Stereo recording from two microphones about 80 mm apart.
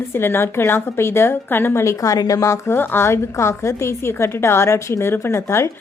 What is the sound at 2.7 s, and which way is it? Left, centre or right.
A woman's voice, left.